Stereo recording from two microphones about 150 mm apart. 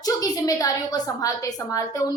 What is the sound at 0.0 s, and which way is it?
A woman's voice, 25° left (ahead or behind).